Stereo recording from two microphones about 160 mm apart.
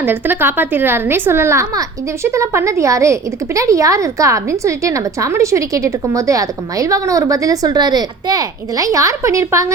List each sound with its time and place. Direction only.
0.0 s a child's voice: 15° right (ahead or behind)